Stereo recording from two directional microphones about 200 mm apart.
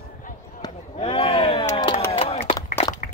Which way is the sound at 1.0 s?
25° left (ahead or behind).